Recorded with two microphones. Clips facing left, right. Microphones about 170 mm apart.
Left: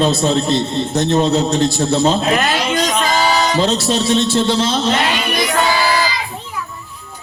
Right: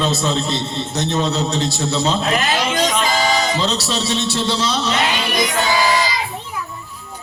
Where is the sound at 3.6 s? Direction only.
50° left (ahead or behind).